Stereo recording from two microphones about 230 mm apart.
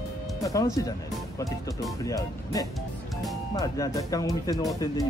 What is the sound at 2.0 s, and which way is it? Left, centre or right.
Speech, centre.